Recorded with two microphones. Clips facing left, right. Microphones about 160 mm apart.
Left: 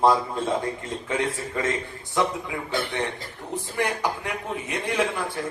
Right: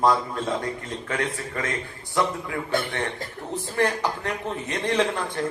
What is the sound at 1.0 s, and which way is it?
Speech, 25° left (ahead or behind).